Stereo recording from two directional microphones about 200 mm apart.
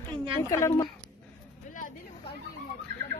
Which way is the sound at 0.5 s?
15° left (ahead or behind).